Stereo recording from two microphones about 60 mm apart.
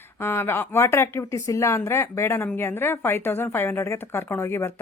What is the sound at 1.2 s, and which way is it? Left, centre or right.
A woman's voice, left.